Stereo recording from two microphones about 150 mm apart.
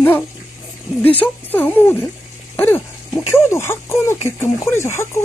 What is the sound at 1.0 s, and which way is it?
Speech, 10° left (ahead or behind).